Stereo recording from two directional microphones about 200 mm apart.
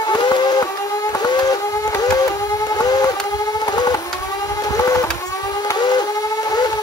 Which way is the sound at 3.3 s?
20° left (ahead or behind).